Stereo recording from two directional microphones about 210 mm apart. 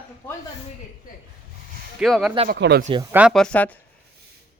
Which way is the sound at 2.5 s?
50° right (ahead or behind).